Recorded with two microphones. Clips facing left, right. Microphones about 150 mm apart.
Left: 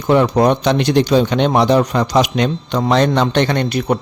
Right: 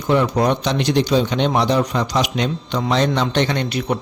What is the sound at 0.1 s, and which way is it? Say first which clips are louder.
Speech: left 4 dB; 55° left (ahead or behind).